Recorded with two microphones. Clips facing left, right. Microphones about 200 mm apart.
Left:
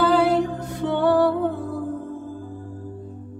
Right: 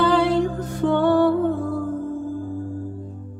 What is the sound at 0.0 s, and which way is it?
Music, 5° left (ahead or behind).